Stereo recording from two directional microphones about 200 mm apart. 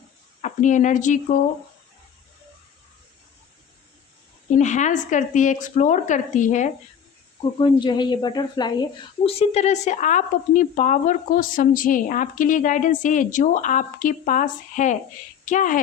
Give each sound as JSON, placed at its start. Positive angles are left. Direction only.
{"t": 0.4, "sound": "speech", "side_deg": 40}
{"t": 4.5, "sound": "speech", "side_deg": 35}
{"t": 7.6, "sound": "a woman's voice", "side_deg": 20}
{"t": 9.2, "sound": "speech", "side_deg": 30}